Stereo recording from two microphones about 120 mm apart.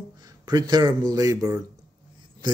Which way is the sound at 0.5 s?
35° right (ahead or behind).